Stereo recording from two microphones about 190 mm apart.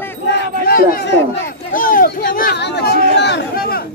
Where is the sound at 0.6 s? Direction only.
50° left (ahead or behind).